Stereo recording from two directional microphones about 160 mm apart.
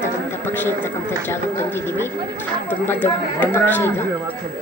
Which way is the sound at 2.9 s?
15° left (ahead or behind).